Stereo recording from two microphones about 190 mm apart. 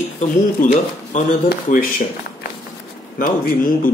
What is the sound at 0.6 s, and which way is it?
Speech, 40° left (ahead or behind).